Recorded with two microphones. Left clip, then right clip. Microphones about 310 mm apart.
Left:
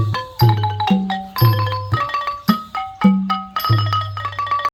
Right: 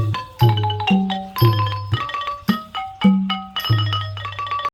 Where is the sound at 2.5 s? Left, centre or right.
Centre.